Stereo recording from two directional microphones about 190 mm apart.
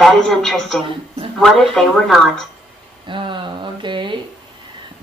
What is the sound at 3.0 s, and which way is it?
Speech, 25° right (ahead or behind).